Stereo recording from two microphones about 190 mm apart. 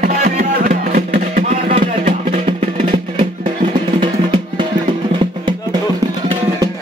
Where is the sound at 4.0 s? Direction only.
25° right (ahead or behind).